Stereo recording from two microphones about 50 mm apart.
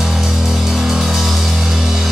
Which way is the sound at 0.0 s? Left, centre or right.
Centre.